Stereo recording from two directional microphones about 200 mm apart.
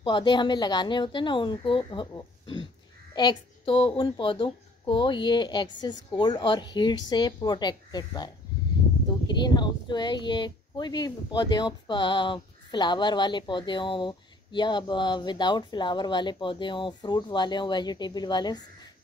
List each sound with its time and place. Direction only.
0.0 s speech: 25° left (ahead or behind)
9.3 s speech: 20° left (ahead or behind)